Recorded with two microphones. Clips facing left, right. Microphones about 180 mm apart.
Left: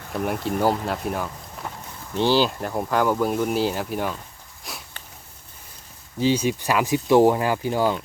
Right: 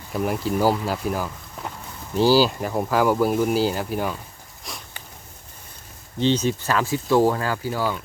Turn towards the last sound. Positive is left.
turn(degrees=20)  # may be behind; listen again after turning